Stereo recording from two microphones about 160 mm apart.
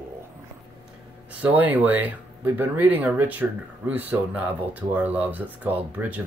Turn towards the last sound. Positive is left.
turn(degrees=-10)  # may be behind; listen again after turning